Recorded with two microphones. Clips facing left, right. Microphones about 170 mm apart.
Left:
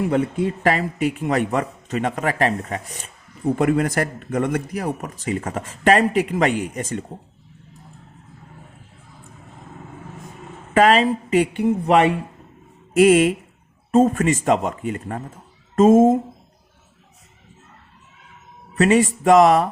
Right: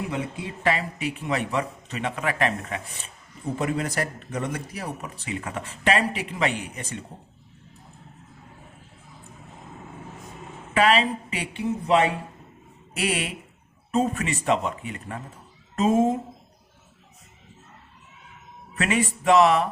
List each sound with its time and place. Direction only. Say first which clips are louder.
0.1 s speech: left 10 dB; 50° left (ahead or behind)
3.5 s speech: left 8 dB; 55° left (ahead or behind)
10.8 s speech: left 5 dB; 45° left (ahead or behind)
18.8 s speech: left 9 dB; 40° left (ahead or behind)